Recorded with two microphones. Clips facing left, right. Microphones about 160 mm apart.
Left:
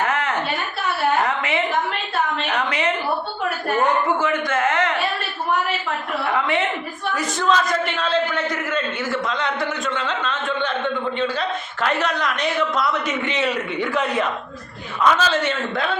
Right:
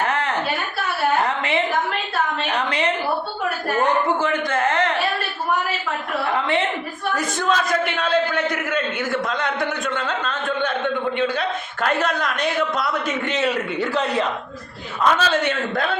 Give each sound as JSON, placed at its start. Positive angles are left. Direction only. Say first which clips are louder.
{"t": 0.0, "sound": "a sound", "louder": "even", "side_deg": -35}
{"t": 4.2, "sound": "speech", "louder": "even", "side_deg": -35}
{"t": 7.2, "sound": "a man's voice", "louder": "left 2 dB", "side_deg": -50}
{"t": 13.8, "sound": "speech", "louder": "even", "side_deg": -35}
{"t": 15.0, "sound": "a man's voice", "louder": "even", "side_deg": -50}